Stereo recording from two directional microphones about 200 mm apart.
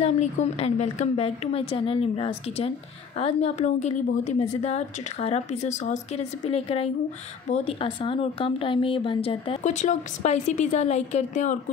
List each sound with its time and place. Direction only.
0.0 s speech: 30° left (ahead or behind)